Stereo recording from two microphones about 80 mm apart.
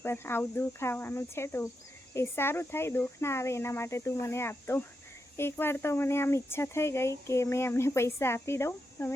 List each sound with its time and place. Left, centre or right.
0.0 s speech: left